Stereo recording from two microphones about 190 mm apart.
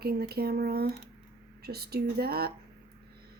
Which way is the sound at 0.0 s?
55° right (ahead or behind).